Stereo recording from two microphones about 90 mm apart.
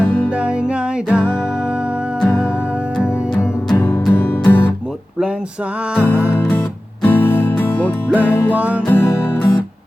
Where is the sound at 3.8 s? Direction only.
20° left (ahead or behind).